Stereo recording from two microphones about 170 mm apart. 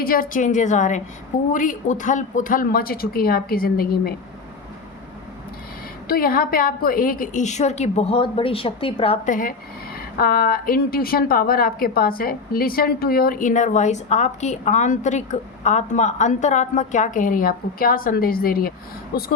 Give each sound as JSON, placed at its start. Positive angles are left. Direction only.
{"t": 0.0, "sound": "a woman's voice", "side_deg": 55}
{"t": 6.1, "sound": "a woman's voice", "side_deg": 60}
{"t": 9.2, "sound": "a woman's voice", "side_deg": 50}